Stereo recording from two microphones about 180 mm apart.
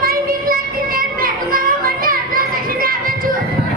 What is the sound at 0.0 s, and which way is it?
Children playing, 55° right (ahead or behind).